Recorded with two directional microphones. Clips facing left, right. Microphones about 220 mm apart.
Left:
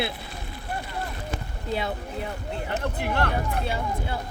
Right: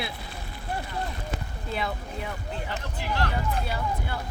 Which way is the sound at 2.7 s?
55° left (ahead or behind).